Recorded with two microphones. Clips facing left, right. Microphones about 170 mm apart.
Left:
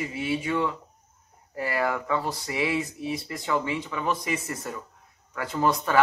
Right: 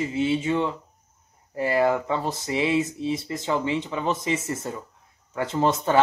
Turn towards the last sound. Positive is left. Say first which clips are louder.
# right 2 dB
turn(degrees=-25)  # may be behind; listen again after turning